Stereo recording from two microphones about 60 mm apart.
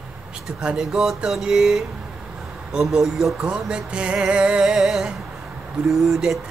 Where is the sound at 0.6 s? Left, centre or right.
Centre.